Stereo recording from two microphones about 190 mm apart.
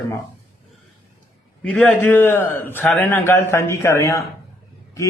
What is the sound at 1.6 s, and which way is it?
A man's voice, 10° left (ahead or behind).